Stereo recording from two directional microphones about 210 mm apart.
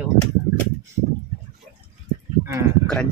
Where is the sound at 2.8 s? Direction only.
5° left (ahead or behind).